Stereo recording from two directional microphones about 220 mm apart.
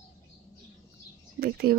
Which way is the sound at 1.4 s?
45° right (ahead or behind).